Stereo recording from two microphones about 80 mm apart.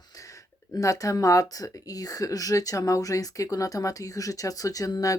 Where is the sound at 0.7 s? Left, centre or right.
Left.